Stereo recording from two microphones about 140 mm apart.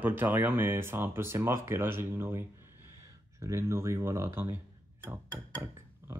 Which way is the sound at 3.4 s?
20° right (ahead or behind).